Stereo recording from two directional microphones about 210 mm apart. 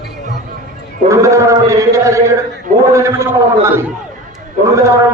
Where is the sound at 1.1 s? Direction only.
15° right (ahead or behind).